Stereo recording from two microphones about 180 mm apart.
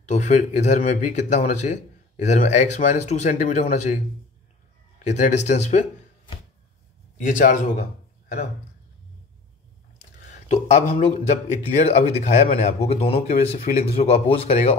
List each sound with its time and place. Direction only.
0.1 s speech: 40° left (ahead or behind)
7.2 s a man's voice: 45° left (ahead or behind)
10.2 s speech: 40° left (ahead or behind)